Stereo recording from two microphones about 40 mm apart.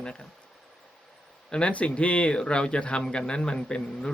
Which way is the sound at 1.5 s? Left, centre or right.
Left.